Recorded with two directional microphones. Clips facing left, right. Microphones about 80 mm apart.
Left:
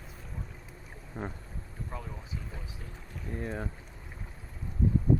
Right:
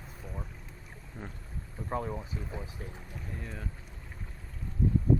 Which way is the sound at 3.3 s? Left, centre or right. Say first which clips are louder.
Left 8 dB; left.